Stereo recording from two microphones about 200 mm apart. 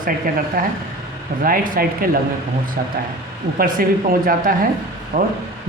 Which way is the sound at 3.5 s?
45° right (ahead or behind).